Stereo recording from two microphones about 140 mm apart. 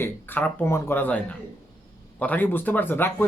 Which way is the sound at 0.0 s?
15° left (ahead or behind).